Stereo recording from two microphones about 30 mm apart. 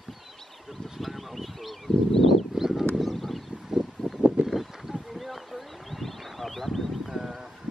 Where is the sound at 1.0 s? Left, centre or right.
Centre.